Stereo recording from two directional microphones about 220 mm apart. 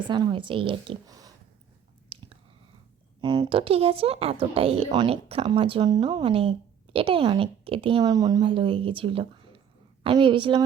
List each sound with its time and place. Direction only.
0.1 s speech: 20° right (ahead or behind)
2.1 s chewing: 25° right (ahead or behind)
3.2 s speech: 20° right (ahead or behind)